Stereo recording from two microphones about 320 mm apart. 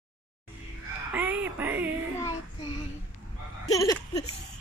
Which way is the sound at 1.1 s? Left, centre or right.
Centre.